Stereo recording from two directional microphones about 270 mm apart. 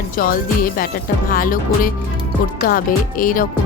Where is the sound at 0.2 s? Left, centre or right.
Left.